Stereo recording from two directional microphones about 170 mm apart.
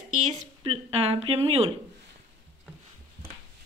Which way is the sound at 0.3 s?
35° right (ahead or behind).